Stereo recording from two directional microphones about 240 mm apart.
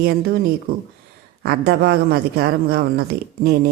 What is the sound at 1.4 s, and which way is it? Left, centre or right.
Speech, right.